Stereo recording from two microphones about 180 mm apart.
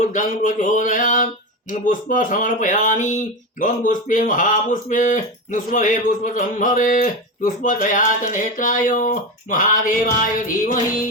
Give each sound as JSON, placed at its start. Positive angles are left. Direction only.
{"t": 0.0, "sound": "speech", "side_deg": 45}